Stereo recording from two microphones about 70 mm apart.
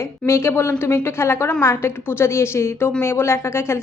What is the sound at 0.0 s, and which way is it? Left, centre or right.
A woman's voice, left.